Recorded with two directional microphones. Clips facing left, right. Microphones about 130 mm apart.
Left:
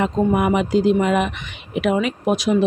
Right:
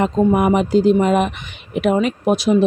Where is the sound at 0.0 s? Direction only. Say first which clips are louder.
Right 3 dB; 40° right (ahead or behind).